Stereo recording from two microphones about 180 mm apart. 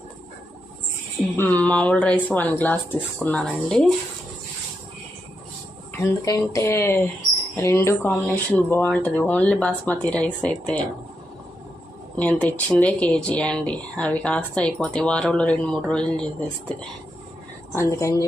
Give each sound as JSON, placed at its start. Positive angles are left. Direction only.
{"t": 1.4, "sound": "speech", "side_deg": 10}
{"t": 5.9, "sound": "speech", "side_deg": 15}
{"t": 12.1, "sound": "speech", "side_deg": 5}